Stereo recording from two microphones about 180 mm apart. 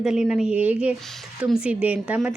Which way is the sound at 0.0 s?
5° right (ahead or behind).